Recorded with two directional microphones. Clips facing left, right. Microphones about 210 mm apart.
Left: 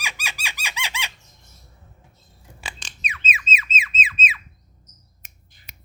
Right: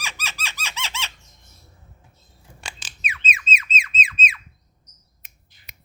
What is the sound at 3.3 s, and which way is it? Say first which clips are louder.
Squawk: even; 5° left (ahead or behind).